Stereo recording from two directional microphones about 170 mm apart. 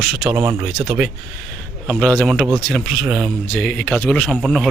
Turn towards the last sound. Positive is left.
turn(degrees=0)  # may be behind; listen again after turning